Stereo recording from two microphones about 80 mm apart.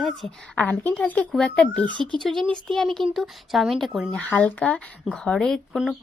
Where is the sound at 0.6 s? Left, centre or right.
Centre.